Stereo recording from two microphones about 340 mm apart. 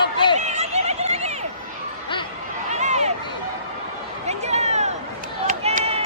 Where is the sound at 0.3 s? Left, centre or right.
Centre.